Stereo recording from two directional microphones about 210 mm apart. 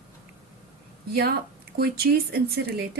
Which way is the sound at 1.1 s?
45° right (ahead or behind).